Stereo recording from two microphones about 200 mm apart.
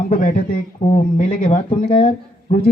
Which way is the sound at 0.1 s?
45° left (ahead or behind).